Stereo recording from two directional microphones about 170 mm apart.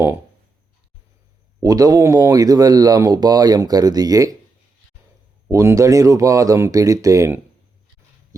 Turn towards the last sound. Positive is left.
turn(degrees=-15)  # may be behind; listen again after turning